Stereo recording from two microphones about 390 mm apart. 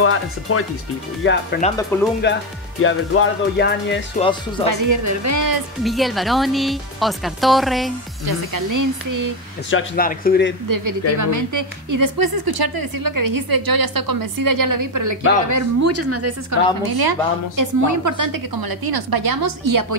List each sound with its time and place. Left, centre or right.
0.0 s speech: left
1.2 s music: left
1.9 s speech: centre
2.8 s music: left
4.2 s speech: centre
4.6 s speech: right
5.9 s speech: centre
8.3 s speech: right
9.7 s music: left
10.7 s a woman's voice: right
16.9 s a woman's voice: right
17.8 s a woman's voice: right